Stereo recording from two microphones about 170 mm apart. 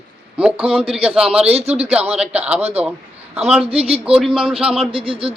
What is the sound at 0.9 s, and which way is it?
Speech, 5° right (ahead or behind).